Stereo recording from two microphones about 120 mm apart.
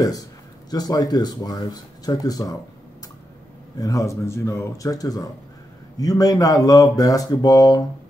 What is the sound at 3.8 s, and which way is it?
Speech, 30° left (ahead or behind).